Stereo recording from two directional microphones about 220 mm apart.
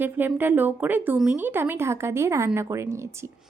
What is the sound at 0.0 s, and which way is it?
Speech, 10° right (ahead or behind).